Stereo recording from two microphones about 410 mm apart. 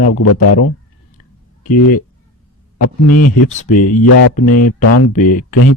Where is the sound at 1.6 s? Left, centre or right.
Centre.